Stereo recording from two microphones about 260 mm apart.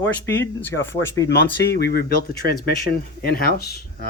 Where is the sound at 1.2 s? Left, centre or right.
Left.